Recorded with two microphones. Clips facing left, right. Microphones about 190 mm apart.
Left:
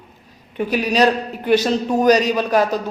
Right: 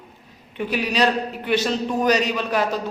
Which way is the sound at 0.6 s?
45° left (ahead or behind).